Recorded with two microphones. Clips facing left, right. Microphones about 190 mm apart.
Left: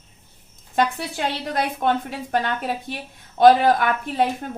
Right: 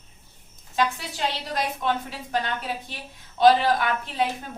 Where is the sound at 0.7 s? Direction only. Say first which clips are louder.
Left 4 dB; 55° left (ahead or behind).